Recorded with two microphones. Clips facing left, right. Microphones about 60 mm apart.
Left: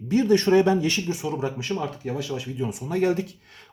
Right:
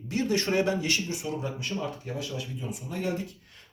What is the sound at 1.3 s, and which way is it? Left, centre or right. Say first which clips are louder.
Speech: left 5 dB; left.